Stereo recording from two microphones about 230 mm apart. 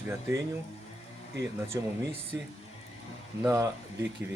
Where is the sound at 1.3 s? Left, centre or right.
Right.